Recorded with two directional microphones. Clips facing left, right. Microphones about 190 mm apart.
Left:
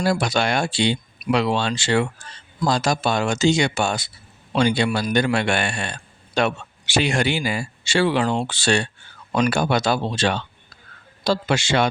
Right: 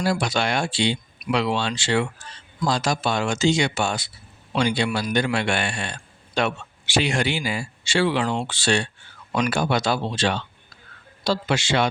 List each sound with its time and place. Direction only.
0.0 s speech: 45° left (ahead or behind)